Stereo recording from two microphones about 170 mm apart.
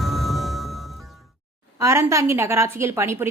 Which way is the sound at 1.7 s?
15° right (ahead or behind).